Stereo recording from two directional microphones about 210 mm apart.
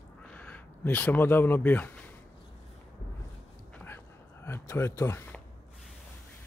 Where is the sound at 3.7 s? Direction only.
10° left (ahead or behind).